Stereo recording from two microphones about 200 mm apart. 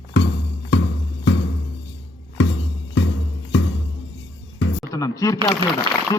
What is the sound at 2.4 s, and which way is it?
Music, 65° left (ahead or behind).